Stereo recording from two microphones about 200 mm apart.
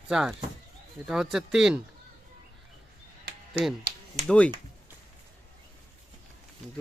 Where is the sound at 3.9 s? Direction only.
50° right (ahead or behind).